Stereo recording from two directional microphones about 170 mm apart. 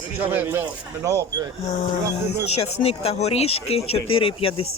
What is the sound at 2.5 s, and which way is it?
Speech, 35° left (ahead or behind).